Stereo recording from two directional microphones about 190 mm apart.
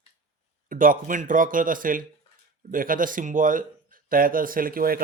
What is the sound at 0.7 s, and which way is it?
Speech, 45° right (ahead or behind).